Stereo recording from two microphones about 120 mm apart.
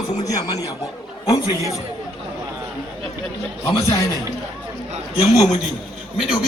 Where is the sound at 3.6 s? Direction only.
30° left (ahead or behind).